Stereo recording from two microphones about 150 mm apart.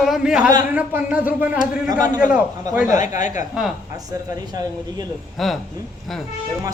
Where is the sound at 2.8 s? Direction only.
60° left (ahead or behind).